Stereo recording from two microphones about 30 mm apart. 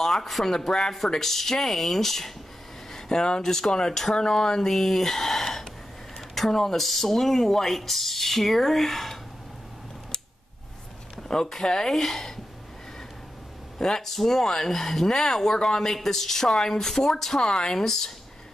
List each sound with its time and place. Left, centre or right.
0.0 s speech: centre
0.5 s speech: centre
2.9 s speech: left
4.6 s speech: centre
11.2 s speech: centre
13.7 s speech: centre
17.3 s speech: left
17.7 s speech: centre